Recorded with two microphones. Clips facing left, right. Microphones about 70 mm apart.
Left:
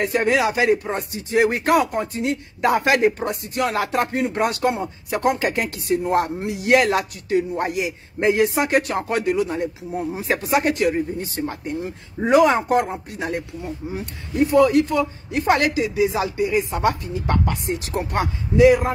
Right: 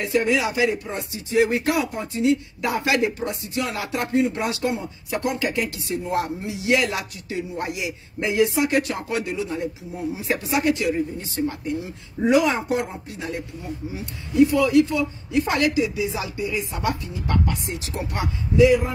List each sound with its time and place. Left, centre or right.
0.0 s speech: left